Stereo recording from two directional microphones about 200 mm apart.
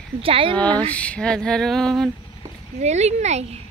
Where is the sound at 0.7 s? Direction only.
5° left (ahead or behind).